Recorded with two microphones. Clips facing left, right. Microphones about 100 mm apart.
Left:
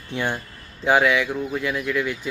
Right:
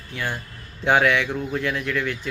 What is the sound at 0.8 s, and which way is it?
Speech, 5° left (ahead or behind).